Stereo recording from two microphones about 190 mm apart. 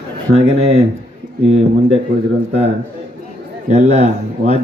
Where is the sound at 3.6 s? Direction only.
35° right (ahead or behind).